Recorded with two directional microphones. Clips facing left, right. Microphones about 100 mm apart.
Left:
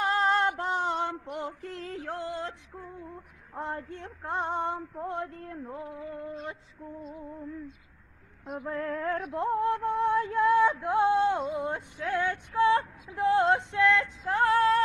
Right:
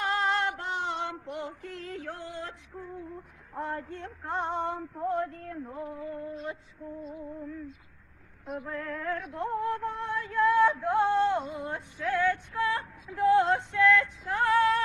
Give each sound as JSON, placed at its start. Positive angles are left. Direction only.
{"t": 0.0, "sound": "female singing", "side_deg": 35}
{"t": 3.5, "sound": "speech", "side_deg": 25}
{"t": 3.9, "sound": "a sound", "side_deg": 15}
{"t": 5.0, "sound": "speech", "side_deg": 25}
{"t": 8.7, "sound": "music", "side_deg": 35}